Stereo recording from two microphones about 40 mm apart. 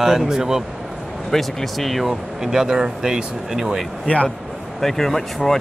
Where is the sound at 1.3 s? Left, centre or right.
Centre.